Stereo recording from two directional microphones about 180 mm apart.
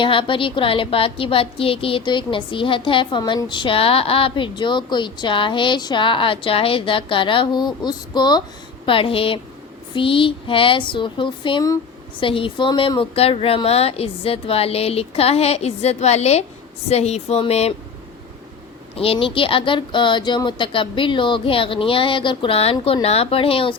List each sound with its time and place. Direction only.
0.0 s a woman's voice: 30° left (ahead or behind)
18.9 s a woman's voice: 30° left (ahead or behind)